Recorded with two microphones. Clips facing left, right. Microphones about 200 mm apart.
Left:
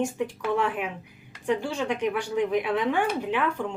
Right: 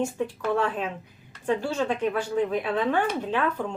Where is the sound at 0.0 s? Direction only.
15° left (ahead or behind).